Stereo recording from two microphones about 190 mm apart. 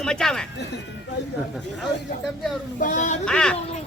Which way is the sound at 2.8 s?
40° left (ahead or behind).